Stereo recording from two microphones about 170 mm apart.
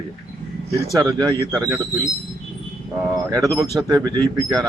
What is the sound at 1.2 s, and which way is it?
Speech, 25° right (ahead or behind).